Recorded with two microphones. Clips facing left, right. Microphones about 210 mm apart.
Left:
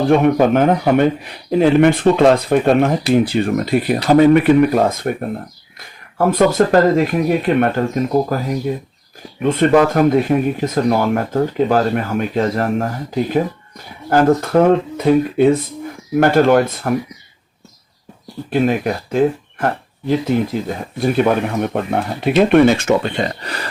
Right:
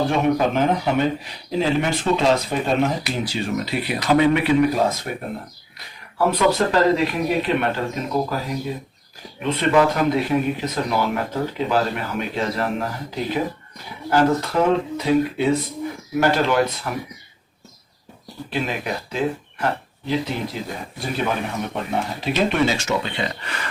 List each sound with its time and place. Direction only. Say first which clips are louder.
0.1 s speech: left 7 dB; 55° left (ahead or behind)
6.1 s speech: left 5 dB; 50° left (ahead or behind)
9.4 s speech: left 5 dB; 50° left (ahead or behind)
18.5 s speech: left 9 dB; 50° left (ahead or behind)